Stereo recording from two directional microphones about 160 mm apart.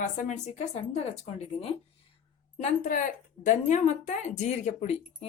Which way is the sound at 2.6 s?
55° left (ahead or behind).